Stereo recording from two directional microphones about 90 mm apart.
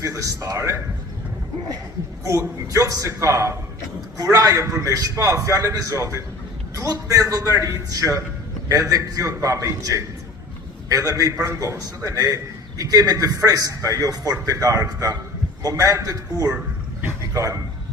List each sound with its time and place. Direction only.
0.0 s a man's voice: 35° right (ahead or behind)
2.2 s a man's voice: 35° right (ahead or behind)